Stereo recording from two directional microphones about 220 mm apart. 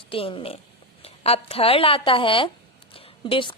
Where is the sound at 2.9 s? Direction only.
25° left (ahead or behind).